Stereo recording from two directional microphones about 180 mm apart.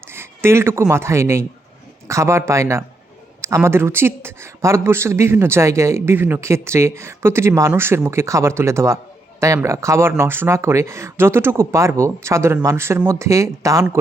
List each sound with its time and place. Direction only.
0.1 s speech: 15° right (ahead or behind)